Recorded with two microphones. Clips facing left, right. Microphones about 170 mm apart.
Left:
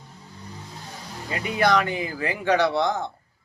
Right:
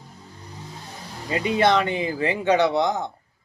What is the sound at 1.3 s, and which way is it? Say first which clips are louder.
Speech: right 2 dB; 25° right (ahead or behind).